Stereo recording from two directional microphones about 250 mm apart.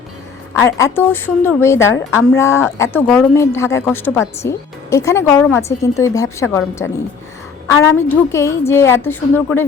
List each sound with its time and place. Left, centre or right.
0.5 s speech: centre